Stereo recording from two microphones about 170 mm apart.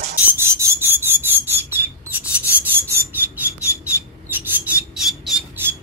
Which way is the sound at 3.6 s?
15° left (ahead or behind).